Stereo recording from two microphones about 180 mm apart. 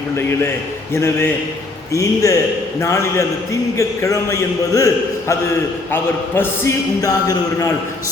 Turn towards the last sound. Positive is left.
turn(degrees=20)  # may be behind; listen again after turning